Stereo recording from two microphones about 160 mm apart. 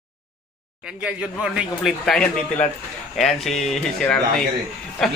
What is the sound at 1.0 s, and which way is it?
A man's voice, 5° right (ahead or behind).